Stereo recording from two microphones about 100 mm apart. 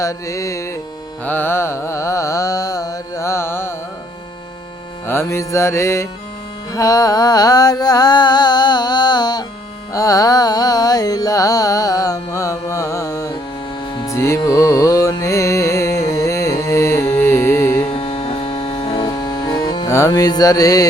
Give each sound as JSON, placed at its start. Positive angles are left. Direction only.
{"t": 0.0, "sound": "music", "side_deg": 30}
{"t": 1.2, "sound": "carnatic music", "side_deg": 20}
{"t": 5.0, "sound": "music", "side_deg": 25}
{"t": 6.7, "sound": "a sound", "side_deg": 35}
{"t": 9.9, "sound": "carnatic music", "side_deg": 35}
{"t": 13.9, "sound": "music", "side_deg": 35}
{"t": 17.9, "sound": "mains hum", "side_deg": 65}
{"t": 19.0, "sound": "music", "side_deg": 40}
{"t": 19.9, "sound": "music", "side_deg": 35}